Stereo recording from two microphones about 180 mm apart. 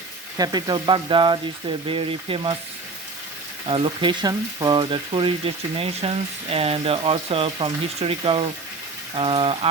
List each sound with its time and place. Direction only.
0.3 s speech: 20° right (ahead or behind)
3.7 s speech: 30° right (ahead or behind)